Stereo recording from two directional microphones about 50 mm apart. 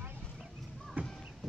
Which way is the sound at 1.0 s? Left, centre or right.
Right.